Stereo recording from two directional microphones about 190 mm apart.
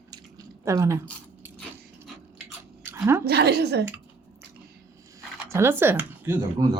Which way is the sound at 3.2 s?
60° right (ahead or behind).